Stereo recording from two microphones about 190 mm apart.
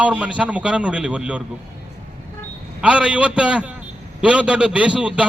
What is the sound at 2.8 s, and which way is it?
A man's voice, 5° right (ahead or behind).